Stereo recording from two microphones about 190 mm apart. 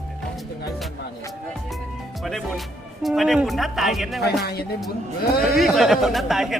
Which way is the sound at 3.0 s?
Centre (ahead or behind).